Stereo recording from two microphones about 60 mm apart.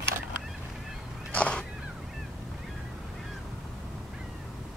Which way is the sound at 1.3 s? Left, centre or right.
Centre.